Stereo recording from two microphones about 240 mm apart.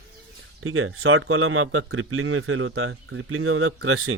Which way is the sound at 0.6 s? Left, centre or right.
Right.